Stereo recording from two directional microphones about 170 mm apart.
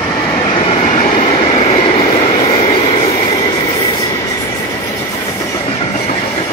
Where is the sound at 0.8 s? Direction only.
45° left (ahead or behind).